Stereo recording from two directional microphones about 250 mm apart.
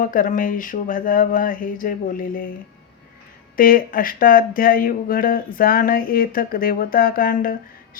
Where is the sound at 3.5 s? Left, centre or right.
Left.